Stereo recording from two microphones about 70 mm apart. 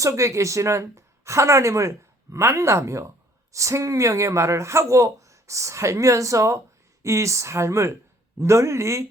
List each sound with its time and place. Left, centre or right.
0.0 s speech: right